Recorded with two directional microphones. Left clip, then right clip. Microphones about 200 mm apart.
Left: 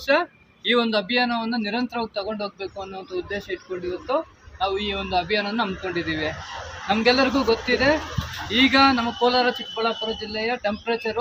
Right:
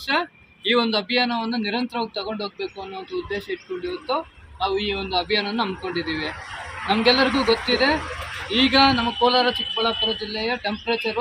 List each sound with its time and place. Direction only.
0.1 s a man's voice: 15° left (ahead or behind)
4.6 s a man's voice: 15° left (ahead or behind)